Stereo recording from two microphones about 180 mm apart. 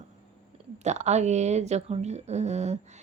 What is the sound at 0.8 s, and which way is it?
Speech, 40° right (ahead or behind).